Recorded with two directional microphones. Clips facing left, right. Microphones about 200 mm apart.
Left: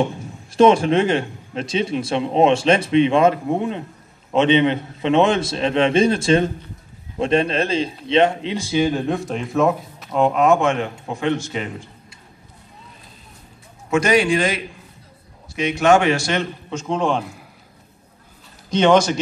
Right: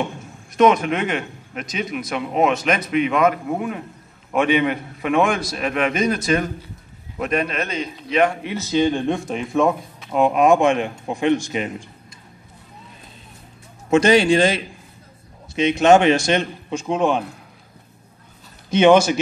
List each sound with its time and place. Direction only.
0.5 s a man's voice: 30° left (ahead or behind); by 10.0 s centre (ahead or behind)
10.1 s a man's voice: 15° right (ahead or behind)
13.8 s a man's voice: 25° right (ahead or behind); by 17.2 s 10° right (ahead or behind)
18.7 s a man's voice: 10° right (ahead or behind)